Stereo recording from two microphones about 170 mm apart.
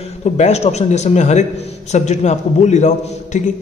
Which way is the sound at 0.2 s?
40° left (ahead or behind).